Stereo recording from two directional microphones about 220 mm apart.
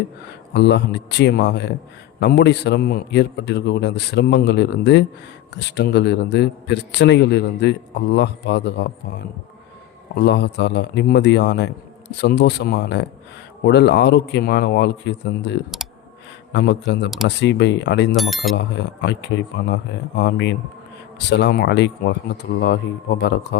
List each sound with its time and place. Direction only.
0.5 s a man's voice: 50° left (ahead or behind)
10.2 s a man's voice: 50° left (ahead or behind)
18.2 s speech: centre (ahead or behind)
19.0 s a man's voice: 50° left (ahead or behind)